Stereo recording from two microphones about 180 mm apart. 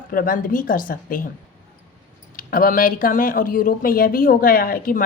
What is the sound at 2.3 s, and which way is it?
Speech, 50° left (ahead or behind).